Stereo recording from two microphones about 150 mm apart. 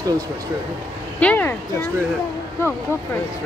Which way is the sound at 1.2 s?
10° left (ahead or behind).